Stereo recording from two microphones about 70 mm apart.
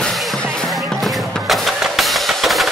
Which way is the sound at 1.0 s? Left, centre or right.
Centre.